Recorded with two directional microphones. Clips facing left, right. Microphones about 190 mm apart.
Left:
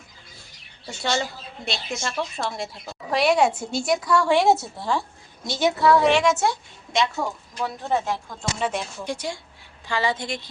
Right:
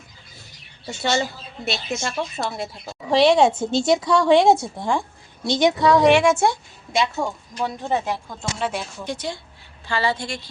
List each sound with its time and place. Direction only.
1.0 s a woman's voice: centre (ahead or behind)
3.3 s a woman's voice: 20° right (ahead or behind); by 8.8 s centre (ahead or behind)
9.0 s speech: 10° left (ahead or behind)